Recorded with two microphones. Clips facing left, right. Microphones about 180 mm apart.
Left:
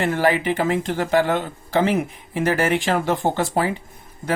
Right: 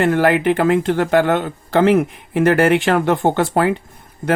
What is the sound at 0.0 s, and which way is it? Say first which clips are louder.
Speech: right 5 dB; 60° right (ahead or behind).